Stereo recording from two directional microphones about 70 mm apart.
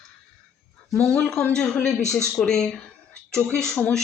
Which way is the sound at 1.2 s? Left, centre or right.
Centre.